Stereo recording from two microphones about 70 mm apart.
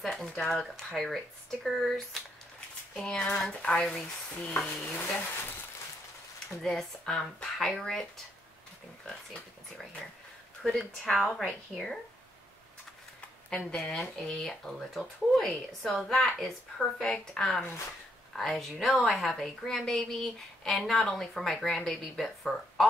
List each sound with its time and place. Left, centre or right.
0.0 s speech: centre
3.0 s speech: centre
4.6 s stir: left
6.6 s a woman's voice: centre
10.6 s a woman's voice: centre
13.5 s a woman's voice: centre